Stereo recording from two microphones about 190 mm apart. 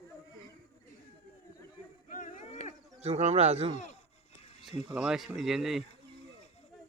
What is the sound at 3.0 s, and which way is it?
Speech, 35° right (ahead or behind).